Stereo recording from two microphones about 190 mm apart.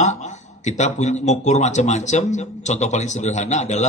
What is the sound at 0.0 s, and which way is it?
Speech, 40° left (ahead or behind).